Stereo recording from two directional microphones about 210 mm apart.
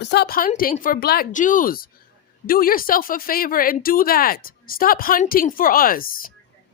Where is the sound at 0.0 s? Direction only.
50° left (ahead or behind).